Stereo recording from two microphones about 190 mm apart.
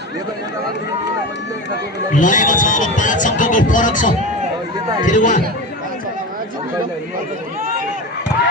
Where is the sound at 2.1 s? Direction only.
40° left (ahead or behind).